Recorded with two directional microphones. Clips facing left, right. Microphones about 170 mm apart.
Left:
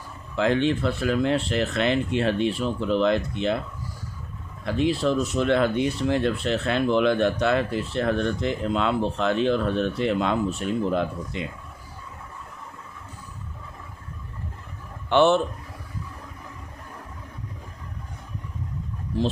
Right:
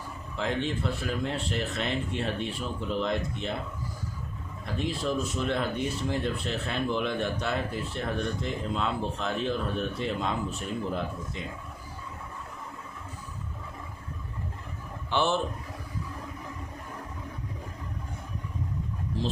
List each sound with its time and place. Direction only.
0.3 s speech: 80° left
4.6 s speech: 75° left (ahead or behind)
15.1 s speech: 70° left (ahead or behind)